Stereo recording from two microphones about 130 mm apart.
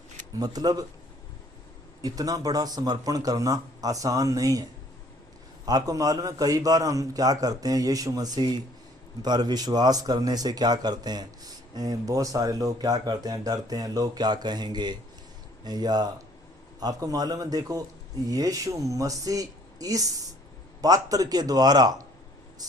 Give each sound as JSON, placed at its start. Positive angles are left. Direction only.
{"t": 0.3, "sound": "a man's voice", "side_deg": -30}
{"t": 2.0, "sound": "a man's voice", "side_deg": -30}
{"t": 5.6, "sound": "a man's voice", "side_deg": -30}